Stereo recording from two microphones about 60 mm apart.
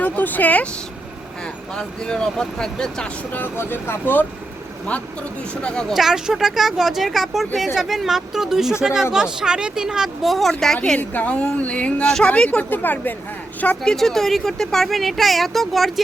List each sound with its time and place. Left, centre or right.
0.0 s speech: left
1.7 s speech: centre
3.3 s speech: left
4.9 s speech: left
5.9 s speech: centre
11.1 s speech: left
12.7 s speech: left
13.8 s speech: centre